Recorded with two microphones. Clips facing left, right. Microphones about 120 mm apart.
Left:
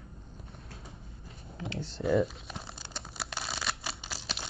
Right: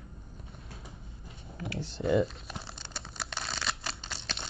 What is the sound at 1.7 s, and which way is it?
Crumpling, centre (ahead or behind).